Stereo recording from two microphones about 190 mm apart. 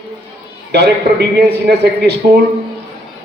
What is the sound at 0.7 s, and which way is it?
A man's voice, 60° right (ahead or behind).